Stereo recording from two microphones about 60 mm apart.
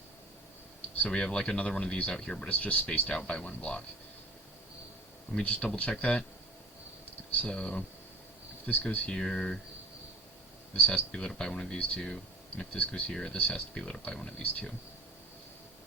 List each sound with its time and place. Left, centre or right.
0.9 s speech: left
1.2 s speech: centre
5.3 s speech: left
7.3 s speech: left
10.8 s speech: left
11.3 s speech: centre
13.1 s speech: centre